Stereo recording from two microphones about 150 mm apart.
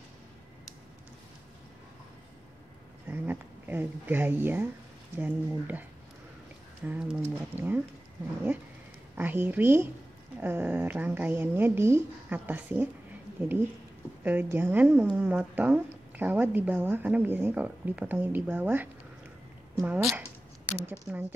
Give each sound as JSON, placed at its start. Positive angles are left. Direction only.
{"t": 3.1, "sound": "speech", "side_deg": -15}
{"t": 9.1, "sound": "speech", "side_deg": -10}
{"t": 14.2, "sound": "speech", "side_deg": -15}